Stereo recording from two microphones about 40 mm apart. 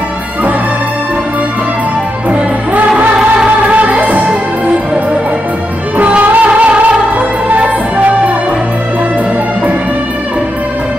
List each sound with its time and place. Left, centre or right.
3.7 s music: right
5.9 s music: right